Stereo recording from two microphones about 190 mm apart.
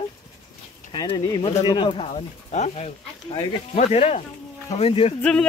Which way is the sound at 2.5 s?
35° left (ahead or behind).